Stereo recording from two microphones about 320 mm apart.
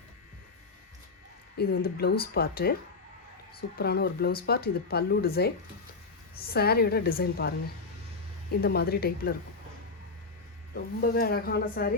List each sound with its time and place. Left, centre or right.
1.5 s speech: left
3.8 s speech: left
8.6 s speech: left
11.0 s speech: left